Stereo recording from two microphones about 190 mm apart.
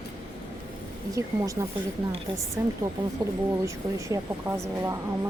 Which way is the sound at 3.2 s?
20° right (ahead or behind).